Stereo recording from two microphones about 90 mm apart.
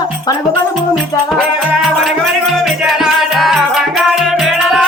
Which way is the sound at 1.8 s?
Centre (ahead or behind).